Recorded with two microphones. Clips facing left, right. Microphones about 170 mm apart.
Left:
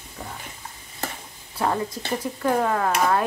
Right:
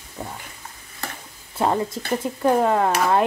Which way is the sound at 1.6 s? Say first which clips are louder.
Right 3 dB; 25° right (ahead or behind).